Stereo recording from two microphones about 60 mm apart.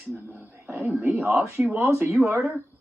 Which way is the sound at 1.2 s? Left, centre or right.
Right.